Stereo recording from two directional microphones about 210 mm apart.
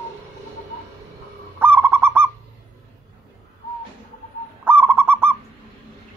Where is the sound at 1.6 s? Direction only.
10° right (ahead or behind).